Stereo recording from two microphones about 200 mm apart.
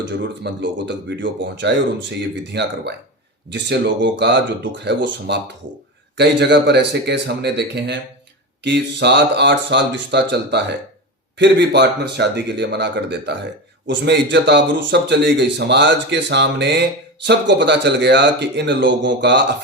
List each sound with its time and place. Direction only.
0.0 s speech: 65° right (ahead or behind)